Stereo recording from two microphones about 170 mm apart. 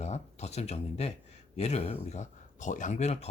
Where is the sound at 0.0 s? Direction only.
40° left (ahead or behind).